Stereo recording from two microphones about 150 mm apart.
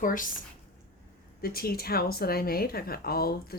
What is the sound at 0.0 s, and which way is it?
Speech, 65° left (ahead or behind).